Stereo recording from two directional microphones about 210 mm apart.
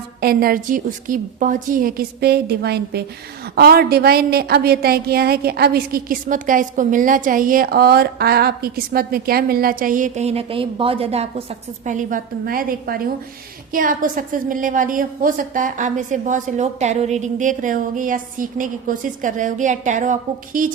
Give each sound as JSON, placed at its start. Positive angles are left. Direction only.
{"t": 0.2, "sound": "a woman's voice", "side_deg": -45}